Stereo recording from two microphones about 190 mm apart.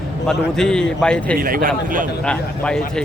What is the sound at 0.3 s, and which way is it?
A man's voice, 5° left (ahead or behind).